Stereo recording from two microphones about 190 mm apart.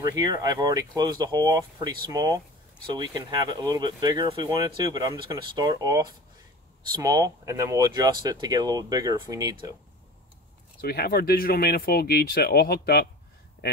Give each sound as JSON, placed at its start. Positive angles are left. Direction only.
{"t": 0.1, "sound": "speech", "side_deg": -20}
{"t": 10.8, "sound": "speech", "side_deg": 55}